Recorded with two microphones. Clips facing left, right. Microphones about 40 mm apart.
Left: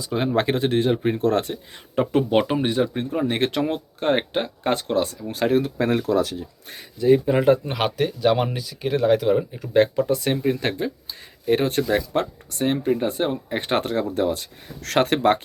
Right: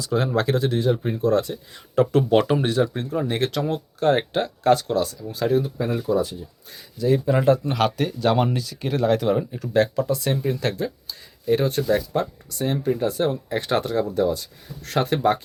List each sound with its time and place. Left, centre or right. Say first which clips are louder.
0.0 s speech: right 2 dB; centre
0.3 s speech: left 4 dB; left
2.0 s speech: right 2 dB; centre; by 5.6 s left
5.6 s speech: left 3 dB; left
7.0 s speech: left 2 dB; left
9.7 s speech: left 2 dB; left
11.4 s speech: even; left
14.8 s speech: left 2 dB; left